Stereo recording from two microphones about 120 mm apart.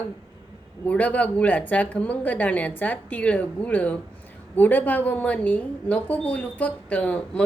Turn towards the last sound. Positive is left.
turn(degrees=10)  # may be behind; listen again after turning